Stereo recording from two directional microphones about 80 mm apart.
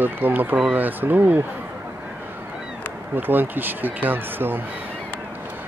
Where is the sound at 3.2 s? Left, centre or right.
Right.